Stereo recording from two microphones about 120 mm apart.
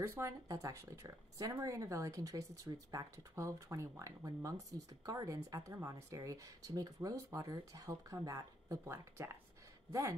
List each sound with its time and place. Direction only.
0.0 s speech: 20° right (ahead or behind)